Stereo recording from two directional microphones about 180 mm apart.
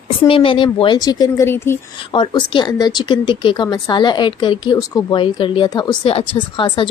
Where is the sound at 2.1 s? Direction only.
25° left (ahead or behind).